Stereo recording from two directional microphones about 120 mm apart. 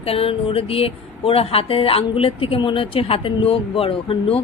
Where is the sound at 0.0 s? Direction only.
50° left (ahead or behind).